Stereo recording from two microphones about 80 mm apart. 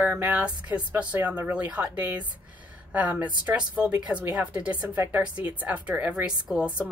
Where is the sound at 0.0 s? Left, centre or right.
Right.